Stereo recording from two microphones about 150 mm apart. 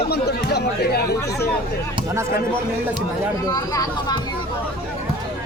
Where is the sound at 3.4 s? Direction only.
25° left (ahead or behind).